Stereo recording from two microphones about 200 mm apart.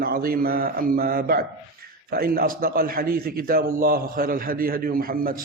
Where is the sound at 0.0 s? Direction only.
50° right (ahead or behind).